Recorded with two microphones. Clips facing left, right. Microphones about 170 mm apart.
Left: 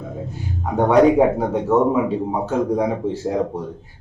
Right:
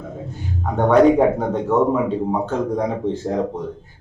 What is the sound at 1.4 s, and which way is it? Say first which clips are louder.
Speech: left 1 dB; 10° left (ahead or behind).